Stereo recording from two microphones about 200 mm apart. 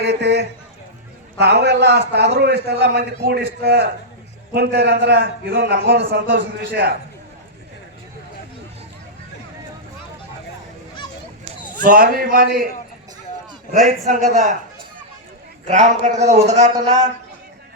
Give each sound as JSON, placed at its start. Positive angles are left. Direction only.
{"t": 0.0, "sound": "a sound", "side_deg": -55}
{"t": 1.4, "sound": "a man's voice", "side_deg": -55}
{"t": 11.8, "sound": "a man's voice", "side_deg": -45}
{"t": 14.3, "sound": "a man's voice", "side_deg": -35}
{"t": 15.6, "sound": "a man's voice", "side_deg": -35}